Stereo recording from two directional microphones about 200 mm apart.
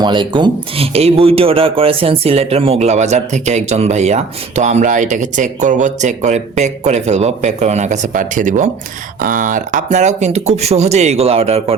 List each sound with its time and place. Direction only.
0.0 s speech: 25° right (ahead or behind)